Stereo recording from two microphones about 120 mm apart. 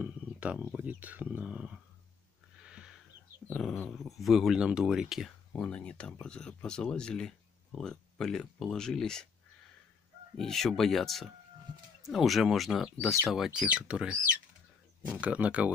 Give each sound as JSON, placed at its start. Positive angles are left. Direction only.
{"t": 0.0, "sound": "speech", "side_deg": -10}
{"t": 2.6, "sound": "a sound", "side_deg": -5}
{"t": 3.9, "sound": "speech", "side_deg": 0}
{"t": 5.6, "sound": "speech", "side_deg": 10}
{"t": 10.3, "sound": "speech", "side_deg": 0}